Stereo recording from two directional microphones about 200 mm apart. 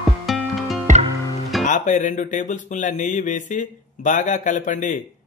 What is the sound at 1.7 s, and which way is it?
Mantra, 40° left (ahead or behind).